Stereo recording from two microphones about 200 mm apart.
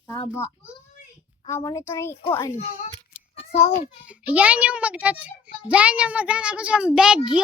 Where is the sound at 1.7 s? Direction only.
15° left (ahead or behind).